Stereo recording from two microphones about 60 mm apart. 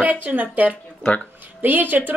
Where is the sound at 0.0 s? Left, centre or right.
Right.